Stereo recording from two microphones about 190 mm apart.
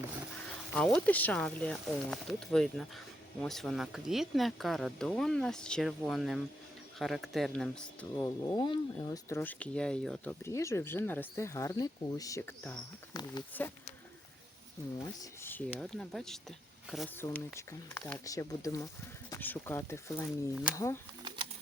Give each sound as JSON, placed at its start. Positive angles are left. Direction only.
{"t": 0.7, "sound": "speech", "side_deg": 5}
{"t": 8.1, "sound": "speech", "side_deg": 15}
{"t": 13.1, "sound": "a sound", "side_deg": 20}
{"t": 13.5, "sound": "speech", "side_deg": 10}
{"t": 15.0, "sound": "speech", "side_deg": 15}
{"t": 17.2, "sound": "speech", "side_deg": 15}